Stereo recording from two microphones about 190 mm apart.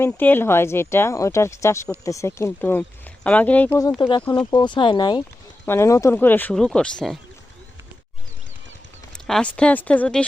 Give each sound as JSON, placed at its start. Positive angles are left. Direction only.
{"t": 0.0, "sound": "speech", "side_deg": 10}
{"t": 9.1, "sound": "speech", "side_deg": 5}